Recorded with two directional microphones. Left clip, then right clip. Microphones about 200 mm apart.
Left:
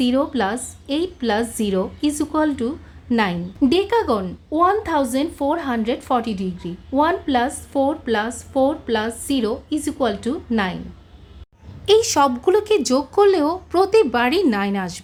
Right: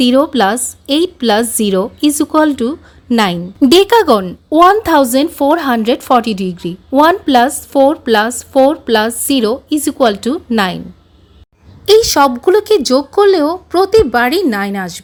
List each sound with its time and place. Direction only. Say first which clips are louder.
0.0 s a woman's voice: right 9 dB; 35° right (ahead or behind)
11.9 s speech: right 7 dB; 25° right (ahead or behind)